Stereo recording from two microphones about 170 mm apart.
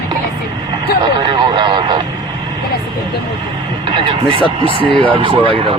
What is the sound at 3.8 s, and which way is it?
Speech, 30° right (ahead or behind).